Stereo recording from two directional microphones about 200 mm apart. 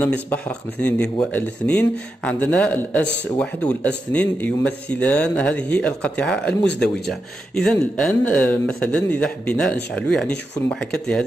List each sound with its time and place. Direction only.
0.0 s speech: 10° left (ahead or behind)